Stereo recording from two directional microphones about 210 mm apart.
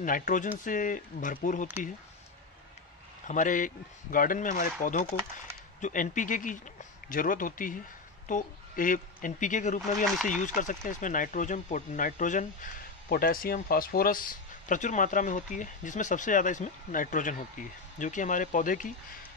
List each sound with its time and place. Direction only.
0.0 s speech: 40° left (ahead or behind)
3.3 s speech: 40° left (ahead or behind)